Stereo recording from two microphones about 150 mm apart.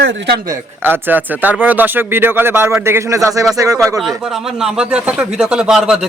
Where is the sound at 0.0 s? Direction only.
90° right.